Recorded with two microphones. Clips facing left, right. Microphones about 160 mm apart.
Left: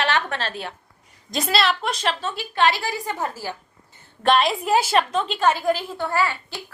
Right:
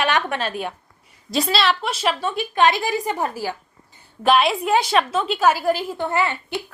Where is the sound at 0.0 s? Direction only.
15° right (ahead or behind).